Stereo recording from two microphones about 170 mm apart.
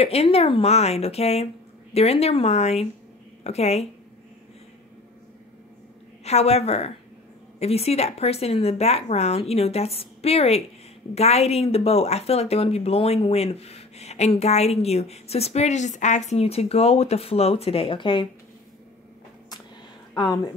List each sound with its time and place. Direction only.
0.0 s speech: 35° left (ahead or behind)
6.2 s speech: 40° left (ahead or behind)
20.2 s a woman's voice: 25° left (ahead or behind)